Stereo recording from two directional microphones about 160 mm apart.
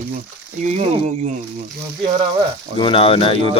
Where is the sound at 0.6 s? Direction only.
45° right (ahead or behind).